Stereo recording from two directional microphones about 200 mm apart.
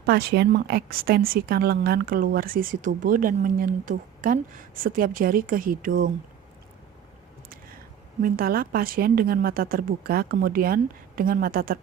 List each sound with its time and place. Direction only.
0.0 s a woman's voice: 50° right (ahead or behind)
8.2 s a woman's voice: 50° right (ahead or behind)